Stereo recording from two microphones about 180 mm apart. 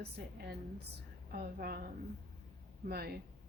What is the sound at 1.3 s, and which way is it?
Speech, 60° right (ahead or behind).